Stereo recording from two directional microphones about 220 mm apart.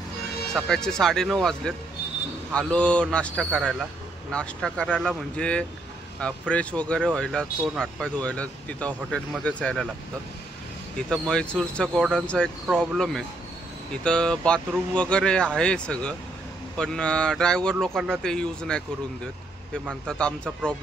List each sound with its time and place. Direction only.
0.7 s speech: centre (ahead or behind)
11.1 s speech: 5° left (ahead or behind)